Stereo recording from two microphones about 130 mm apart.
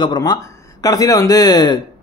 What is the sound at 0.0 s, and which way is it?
Speech, 35° left (ahead or behind).